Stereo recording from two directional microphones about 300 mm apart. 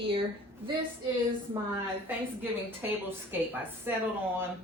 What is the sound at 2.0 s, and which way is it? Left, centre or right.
Speech, centre.